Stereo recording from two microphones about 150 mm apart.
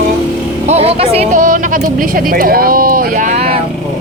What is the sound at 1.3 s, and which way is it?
Speech, 60° right (ahead or behind).